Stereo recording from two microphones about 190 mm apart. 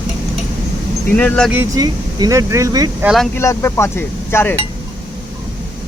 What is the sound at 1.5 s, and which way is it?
Speech, 15° right (ahead or behind).